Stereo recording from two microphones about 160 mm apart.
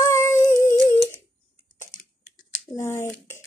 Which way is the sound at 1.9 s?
55° left (ahead or behind).